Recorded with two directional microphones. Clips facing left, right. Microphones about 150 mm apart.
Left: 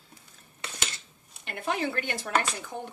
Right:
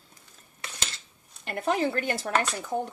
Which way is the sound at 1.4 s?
40° right (ahead or behind).